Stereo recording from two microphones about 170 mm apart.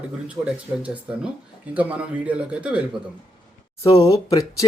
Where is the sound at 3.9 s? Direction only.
20° left (ahead or behind).